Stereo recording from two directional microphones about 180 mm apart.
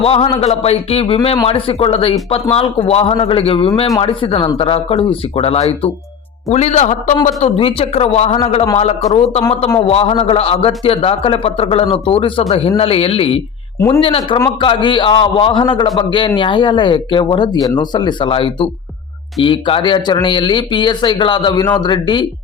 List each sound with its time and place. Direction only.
0.0 s a man's voice: 30° left (ahead or behind)
13.7 s speech: 15° left (ahead or behind)